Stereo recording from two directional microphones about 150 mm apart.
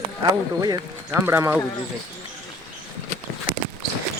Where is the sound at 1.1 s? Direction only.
15° right (ahead or behind).